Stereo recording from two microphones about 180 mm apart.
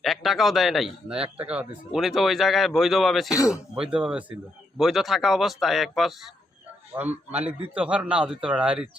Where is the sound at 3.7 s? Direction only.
5° right (ahead or behind).